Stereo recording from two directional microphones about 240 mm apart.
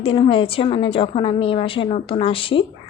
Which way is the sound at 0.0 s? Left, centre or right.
Left.